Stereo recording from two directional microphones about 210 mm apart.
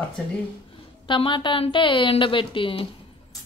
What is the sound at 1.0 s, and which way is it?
A woman's voice, 25° left (ahead or behind).